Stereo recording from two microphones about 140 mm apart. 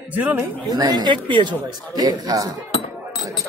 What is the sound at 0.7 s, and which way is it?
A man's voice, 30° right (ahead or behind).